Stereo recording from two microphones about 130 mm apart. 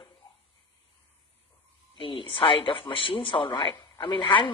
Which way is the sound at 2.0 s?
45° left (ahead or behind).